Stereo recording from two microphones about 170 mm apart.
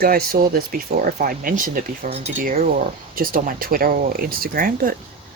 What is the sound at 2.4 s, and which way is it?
Speech, 55° right (ahead or behind).